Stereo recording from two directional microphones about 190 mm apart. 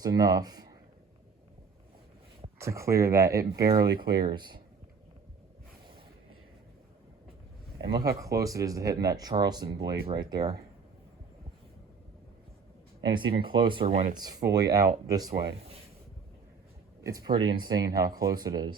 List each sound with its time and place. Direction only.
0.0 s speech: 20° right (ahead or behind)
2.6 s speech: 15° right (ahead or behind)
7.8 s speech: 20° right (ahead or behind)
13.0 s speech: 25° right (ahead or behind)
17.0 s speech: 20° right (ahead or behind)